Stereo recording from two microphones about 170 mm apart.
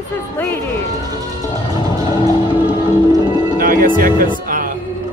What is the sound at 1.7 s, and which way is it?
Music, 20° right (ahead or behind).